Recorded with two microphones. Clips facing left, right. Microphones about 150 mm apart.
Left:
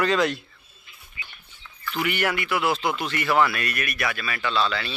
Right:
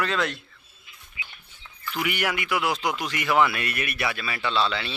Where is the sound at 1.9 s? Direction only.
10° right (ahead or behind).